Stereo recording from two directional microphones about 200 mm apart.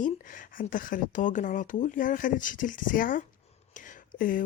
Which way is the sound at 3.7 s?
40° left (ahead or behind).